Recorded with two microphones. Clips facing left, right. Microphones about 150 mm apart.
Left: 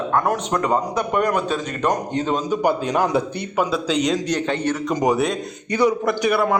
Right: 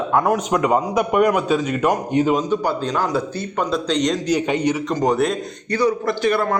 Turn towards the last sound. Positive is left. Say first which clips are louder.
# even
turn(degrees=10)  # may be behind; listen again after turning